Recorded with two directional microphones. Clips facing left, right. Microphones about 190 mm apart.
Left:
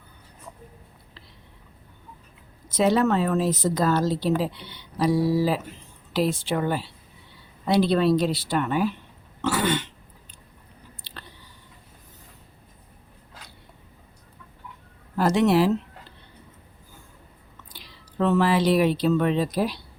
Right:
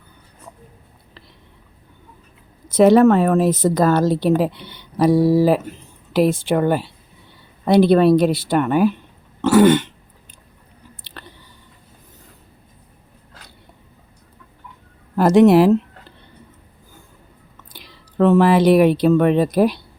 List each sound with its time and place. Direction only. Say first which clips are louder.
2.6 s speech: right 9 dB; 55° right (ahead or behind)
11.0 s chewing: right 4 dB; 60° right (ahead or behind)
15.1 s speech: right 9 dB; 55° right (ahead or behind)
17.7 s speech: right 8 dB; 55° right (ahead or behind)